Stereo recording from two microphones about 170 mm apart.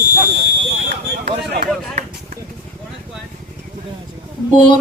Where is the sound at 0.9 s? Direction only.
75° right (ahead or behind).